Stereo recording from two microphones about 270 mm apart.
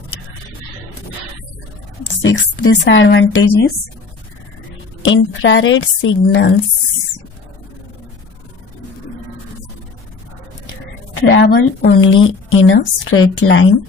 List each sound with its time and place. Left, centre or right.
2.2 s speech: left
5.0 s a woman's voice: left
11.3 s a woman's voice: left